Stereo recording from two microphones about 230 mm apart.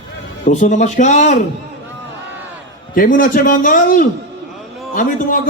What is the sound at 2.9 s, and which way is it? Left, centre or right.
A man's voice, left.